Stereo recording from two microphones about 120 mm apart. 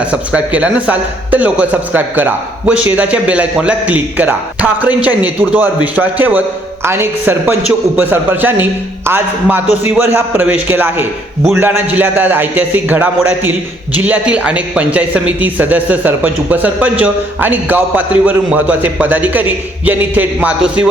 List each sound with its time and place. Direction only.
0.0 s speech: 10° right (ahead or behind)